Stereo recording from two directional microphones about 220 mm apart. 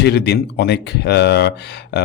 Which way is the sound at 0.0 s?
50° left (ahead or behind).